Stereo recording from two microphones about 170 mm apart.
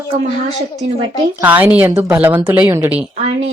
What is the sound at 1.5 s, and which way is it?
Speech, 10° right (ahead or behind).